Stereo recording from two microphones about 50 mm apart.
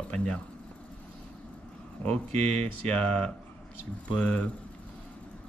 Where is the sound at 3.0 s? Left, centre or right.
Left.